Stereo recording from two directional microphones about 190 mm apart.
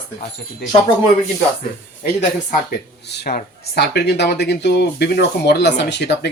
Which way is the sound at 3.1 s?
55° left (ahead or behind).